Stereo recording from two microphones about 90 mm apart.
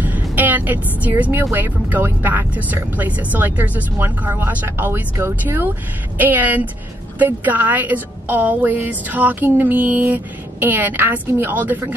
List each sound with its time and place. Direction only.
0.0 s speech: 20° right (ahead or behind)